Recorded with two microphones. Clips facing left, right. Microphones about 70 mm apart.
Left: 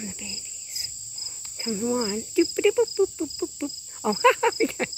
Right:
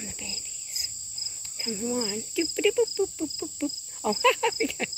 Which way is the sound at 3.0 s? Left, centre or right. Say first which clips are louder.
Left 4 dB; centre.